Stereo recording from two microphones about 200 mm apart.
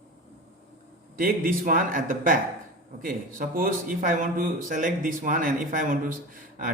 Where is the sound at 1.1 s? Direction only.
45° right (ahead or behind).